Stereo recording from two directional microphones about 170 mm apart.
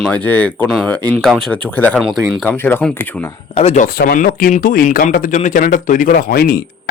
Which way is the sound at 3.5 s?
40° left (ahead or behind).